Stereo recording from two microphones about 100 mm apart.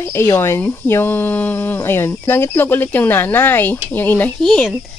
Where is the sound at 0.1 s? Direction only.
25° left (ahead or behind).